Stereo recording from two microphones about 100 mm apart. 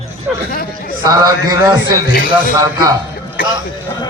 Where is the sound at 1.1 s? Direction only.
40° right (ahead or behind).